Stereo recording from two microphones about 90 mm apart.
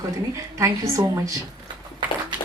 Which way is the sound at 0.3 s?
40° right (ahead or behind).